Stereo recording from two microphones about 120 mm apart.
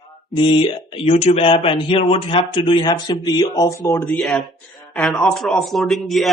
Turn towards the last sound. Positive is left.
turn(degrees=0)  # may be behind; listen again after turning